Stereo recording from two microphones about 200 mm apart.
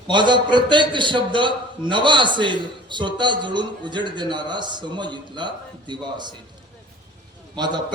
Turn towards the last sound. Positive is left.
turn(degrees=-20)  # may be behind; listen again after turning